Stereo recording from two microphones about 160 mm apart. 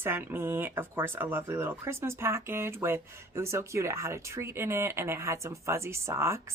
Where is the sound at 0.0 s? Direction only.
15° right (ahead or behind).